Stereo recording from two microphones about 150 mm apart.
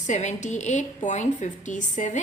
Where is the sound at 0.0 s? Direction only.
50° left (ahead or behind).